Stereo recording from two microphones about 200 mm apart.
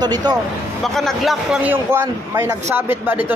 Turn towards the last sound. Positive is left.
turn(degrees=-10)  # may be behind; listen again after turning